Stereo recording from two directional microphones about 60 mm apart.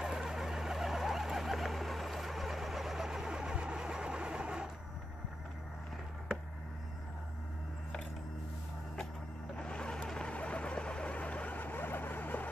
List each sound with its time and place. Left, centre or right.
0.0 s vehicle: centre
9.6 s vehicle: centre; by 12.4 s left